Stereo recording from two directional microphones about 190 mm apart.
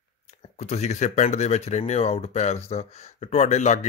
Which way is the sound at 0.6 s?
35° left (ahead or behind).